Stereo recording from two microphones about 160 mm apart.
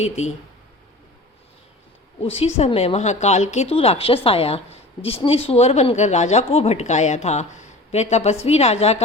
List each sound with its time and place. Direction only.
2.2 s a woman's voice: 35° left (ahead or behind)